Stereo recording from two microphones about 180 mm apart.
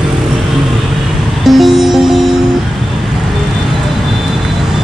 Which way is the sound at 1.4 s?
Centre (ahead or behind).